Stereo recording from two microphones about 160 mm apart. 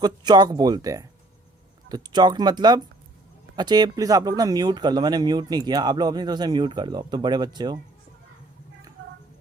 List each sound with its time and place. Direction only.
0.0 s speech: 25° right (ahead or behind)